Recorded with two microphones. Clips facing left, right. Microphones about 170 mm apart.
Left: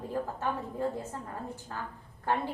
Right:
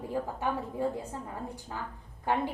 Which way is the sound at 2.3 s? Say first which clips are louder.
Right 1 dB; 15° right (ahead or behind).